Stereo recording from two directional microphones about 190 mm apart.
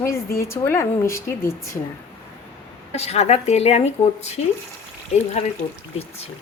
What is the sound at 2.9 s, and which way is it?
Speech, 35° left (ahead or behind).